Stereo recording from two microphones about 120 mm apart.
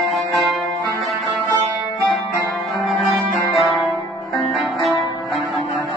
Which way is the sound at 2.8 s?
Centre (ahead or behind).